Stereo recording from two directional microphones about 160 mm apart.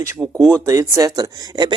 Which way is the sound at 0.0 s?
20° right (ahead or behind).